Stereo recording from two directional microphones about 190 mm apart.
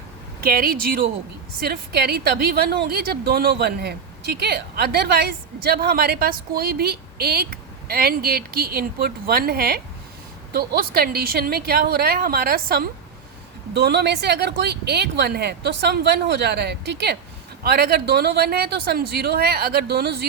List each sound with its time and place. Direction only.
0.4 s a woman's voice: 50° right (ahead or behind)